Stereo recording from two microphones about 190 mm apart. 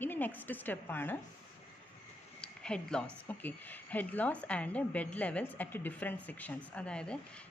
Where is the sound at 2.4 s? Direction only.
5° left (ahead or behind).